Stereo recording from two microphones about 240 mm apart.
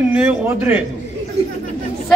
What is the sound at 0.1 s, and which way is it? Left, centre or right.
Speech, centre.